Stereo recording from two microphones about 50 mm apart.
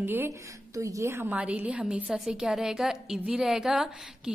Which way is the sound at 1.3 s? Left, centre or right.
Right.